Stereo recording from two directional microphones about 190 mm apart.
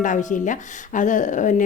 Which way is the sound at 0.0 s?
40° left (ahead or behind).